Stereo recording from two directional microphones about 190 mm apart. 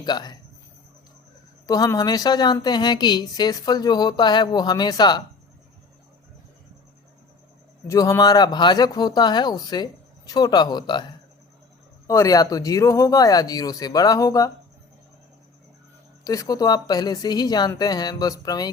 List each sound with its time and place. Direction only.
0.0 s a woman's voice: 20° left (ahead or behind)
1.6 s a woman's voice: 20° left (ahead or behind)
7.9 s a woman's voice: 15° left (ahead or behind)
12.0 s a woman's voice: 15° left (ahead or behind)
16.2 s a woman's voice: 20° left (ahead or behind)